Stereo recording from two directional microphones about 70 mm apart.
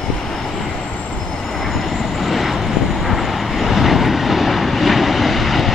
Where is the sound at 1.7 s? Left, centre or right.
Centre.